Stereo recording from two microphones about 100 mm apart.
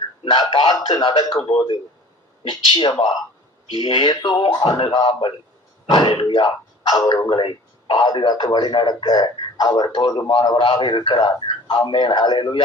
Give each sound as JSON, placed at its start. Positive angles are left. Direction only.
{"t": 0.3, "sound": "a man's voice", "side_deg": 50}
{"t": 7.3, "sound": "a man's voice", "side_deg": 55}